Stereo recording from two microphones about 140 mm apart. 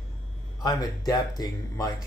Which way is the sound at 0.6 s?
30° left (ahead or behind).